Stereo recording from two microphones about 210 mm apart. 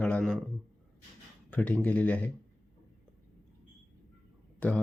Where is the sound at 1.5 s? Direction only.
5° left (ahead or behind).